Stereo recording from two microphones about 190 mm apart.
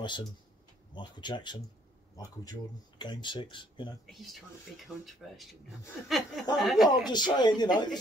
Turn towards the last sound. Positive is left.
turn(degrees=20)  # may be behind; listen again after turning